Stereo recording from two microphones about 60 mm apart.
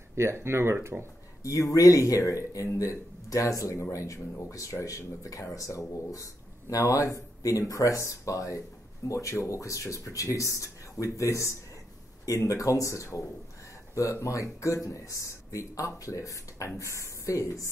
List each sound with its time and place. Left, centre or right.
0.1 s speech: right
1.4 s speech: left
14.2 s speech: left